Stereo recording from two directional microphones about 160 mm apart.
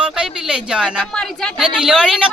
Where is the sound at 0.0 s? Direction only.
5° right (ahead or behind).